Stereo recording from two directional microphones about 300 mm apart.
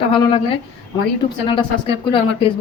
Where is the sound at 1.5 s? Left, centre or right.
Centre.